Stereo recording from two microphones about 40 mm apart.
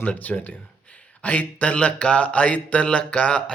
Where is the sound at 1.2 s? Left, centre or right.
Left.